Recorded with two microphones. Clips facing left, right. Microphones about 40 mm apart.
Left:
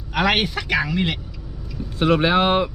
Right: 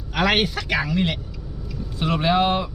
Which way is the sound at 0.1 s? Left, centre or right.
Centre.